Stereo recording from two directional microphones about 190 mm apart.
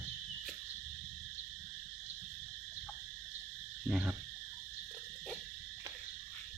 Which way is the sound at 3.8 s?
5° right (ahead or behind).